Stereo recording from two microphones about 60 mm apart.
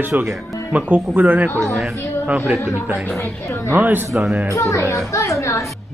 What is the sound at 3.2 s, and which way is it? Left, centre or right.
Speech, left.